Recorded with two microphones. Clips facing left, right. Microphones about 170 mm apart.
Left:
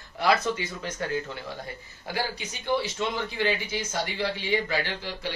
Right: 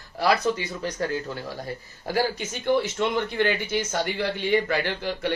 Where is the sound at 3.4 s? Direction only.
60° right (ahead or behind).